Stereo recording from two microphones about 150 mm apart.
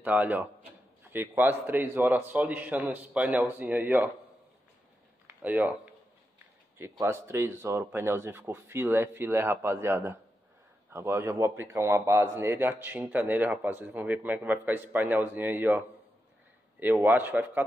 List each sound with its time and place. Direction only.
0.0 s a man's voice: 10° right (ahead or behind)
5.2 s a sound: 10° right (ahead or behind)
6.8 s a man's voice: 20° right (ahead or behind)
16.8 s a man's voice: 10° right (ahead or behind)